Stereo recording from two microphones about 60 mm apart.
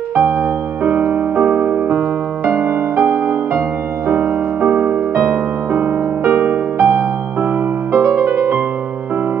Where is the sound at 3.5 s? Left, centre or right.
Right.